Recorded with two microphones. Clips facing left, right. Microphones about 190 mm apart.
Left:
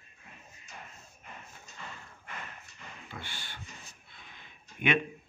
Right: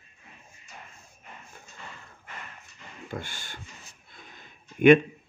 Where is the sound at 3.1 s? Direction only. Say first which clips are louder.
Right 9 dB; 45° right (ahead or behind).